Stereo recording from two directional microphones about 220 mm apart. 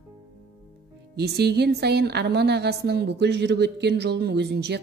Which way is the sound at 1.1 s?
45° right (ahead or behind).